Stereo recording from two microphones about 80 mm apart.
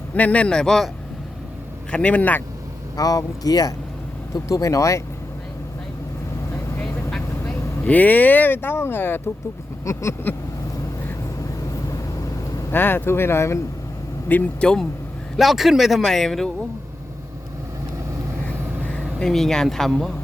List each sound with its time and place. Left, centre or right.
0.1 s a man's voice: centre
1.9 s a man's voice: centre
2.9 s speech: left
7.1 s speech: centre
9.8 s speech: left
12.7 s speech: left
14.6 s a man's voice: centre
15.4 s speech: centre
18.4 s a sound: centre